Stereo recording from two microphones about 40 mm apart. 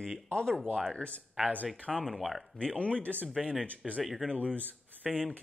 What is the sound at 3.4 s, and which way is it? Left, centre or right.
Speech, centre.